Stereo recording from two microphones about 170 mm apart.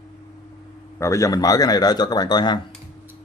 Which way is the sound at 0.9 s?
15° left (ahead or behind).